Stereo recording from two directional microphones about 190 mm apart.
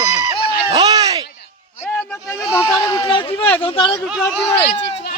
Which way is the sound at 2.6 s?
20° left (ahead or behind).